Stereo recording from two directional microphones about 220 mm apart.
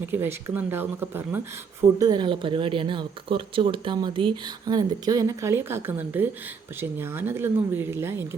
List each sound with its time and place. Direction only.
0.0 s speech: 10° right (ahead or behind)